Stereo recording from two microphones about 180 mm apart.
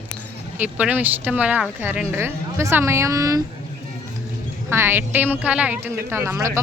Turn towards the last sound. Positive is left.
turn(degrees=-15)  # may be behind; listen again after turning